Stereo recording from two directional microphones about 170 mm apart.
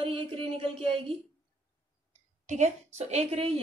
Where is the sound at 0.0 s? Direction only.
35° right (ahead or behind).